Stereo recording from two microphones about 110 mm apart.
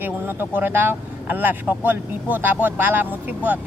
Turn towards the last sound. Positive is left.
turn(degrees=-15)  # may be behind; listen again after turning